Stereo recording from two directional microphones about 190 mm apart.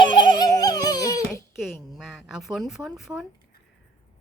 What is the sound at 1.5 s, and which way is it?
A woman's voice, centre (ahead or behind).